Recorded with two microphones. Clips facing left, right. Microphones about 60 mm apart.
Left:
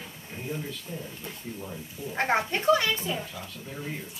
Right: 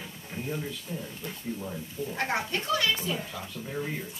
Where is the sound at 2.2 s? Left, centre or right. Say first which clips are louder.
Left 5 dB; left.